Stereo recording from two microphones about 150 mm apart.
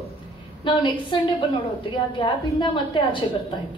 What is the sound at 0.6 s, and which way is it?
Speech, 30° left (ahead or behind).